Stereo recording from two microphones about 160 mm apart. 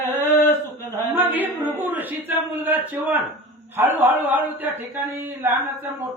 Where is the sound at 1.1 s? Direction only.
10° right (ahead or behind).